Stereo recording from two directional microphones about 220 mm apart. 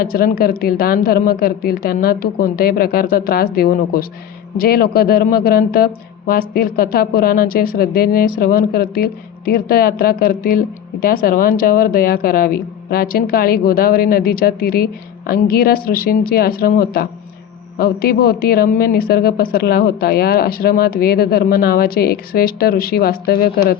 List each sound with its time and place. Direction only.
0.0 s a man's voice: 40° left (ahead or behind)